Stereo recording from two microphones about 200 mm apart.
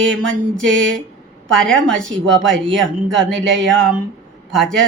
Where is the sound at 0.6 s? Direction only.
70° right (ahead or behind).